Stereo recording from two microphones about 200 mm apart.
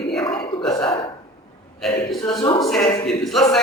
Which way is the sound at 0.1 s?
5° left (ahead or behind).